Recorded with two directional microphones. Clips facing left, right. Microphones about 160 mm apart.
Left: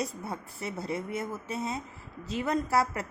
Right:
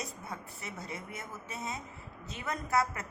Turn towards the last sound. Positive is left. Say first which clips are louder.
# left 4 dB
turn(degrees=35)  # may be behind; listen again after turning